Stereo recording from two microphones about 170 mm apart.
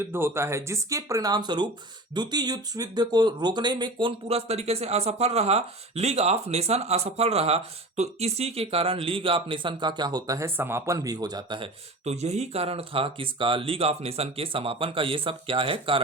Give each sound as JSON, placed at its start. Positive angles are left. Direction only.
{"t": 0.0, "sound": "speech", "side_deg": -15}
{"t": 12.0, "sound": "speech", "side_deg": -40}